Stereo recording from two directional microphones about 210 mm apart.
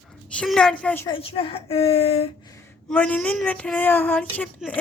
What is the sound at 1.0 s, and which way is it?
A woman's voice, 25° left (ahead or behind).